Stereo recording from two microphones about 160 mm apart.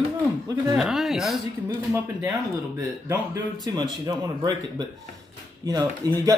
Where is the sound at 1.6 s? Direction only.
20° right (ahead or behind).